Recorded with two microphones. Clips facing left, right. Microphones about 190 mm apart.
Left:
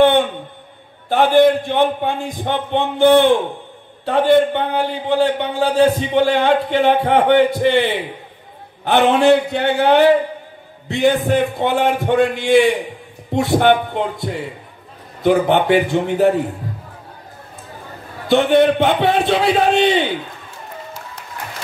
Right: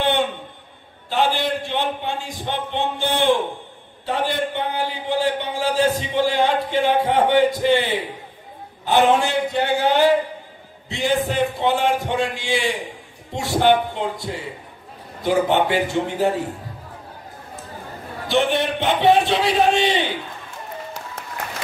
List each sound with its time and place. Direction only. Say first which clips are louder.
1.0 s a man's voice: left 9 dB; 55° left (ahead or behind)
18.3 s a man's voice: left 7 dB; 55° left (ahead or behind)